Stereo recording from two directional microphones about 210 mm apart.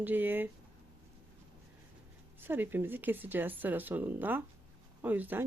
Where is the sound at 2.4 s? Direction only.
10° right (ahead or behind).